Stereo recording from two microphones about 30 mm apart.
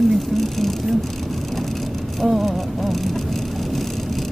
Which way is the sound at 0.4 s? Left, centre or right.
Centre.